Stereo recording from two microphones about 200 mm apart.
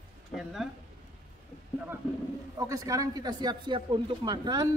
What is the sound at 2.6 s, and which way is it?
Speech, 15° right (ahead or behind).